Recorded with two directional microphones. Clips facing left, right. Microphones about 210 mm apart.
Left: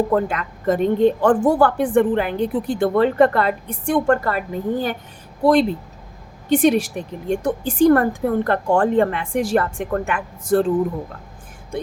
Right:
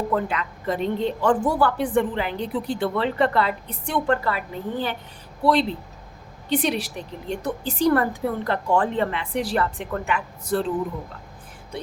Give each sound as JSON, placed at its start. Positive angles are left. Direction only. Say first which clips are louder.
{"t": 0.1, "sound": "a woman's voice", "louder": "left 5 dB", "side_deg": 45}
{"t": 6.5, "sound": "a woman's voice", "louder": "left 8 dB", "side_deg": 50}